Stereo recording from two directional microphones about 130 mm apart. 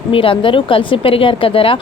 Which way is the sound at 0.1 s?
40° left (ahead or behind).